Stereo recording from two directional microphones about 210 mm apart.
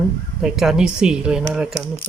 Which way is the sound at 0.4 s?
Centre (ahead or behind).